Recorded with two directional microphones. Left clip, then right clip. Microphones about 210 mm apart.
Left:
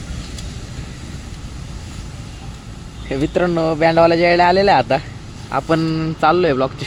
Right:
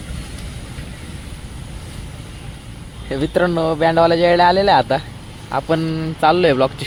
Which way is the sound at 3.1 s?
Centre (ahead or behind).